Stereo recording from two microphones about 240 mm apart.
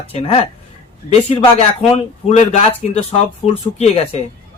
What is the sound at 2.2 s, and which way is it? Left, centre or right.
A man's voice, left.